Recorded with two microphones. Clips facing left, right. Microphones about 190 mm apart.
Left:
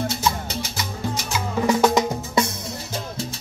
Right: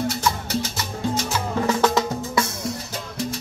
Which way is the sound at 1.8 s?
15° left (ahead or behind).